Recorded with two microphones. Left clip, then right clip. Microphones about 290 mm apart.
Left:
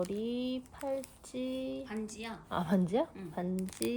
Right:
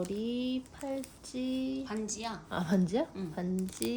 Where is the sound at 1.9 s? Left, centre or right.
Centre.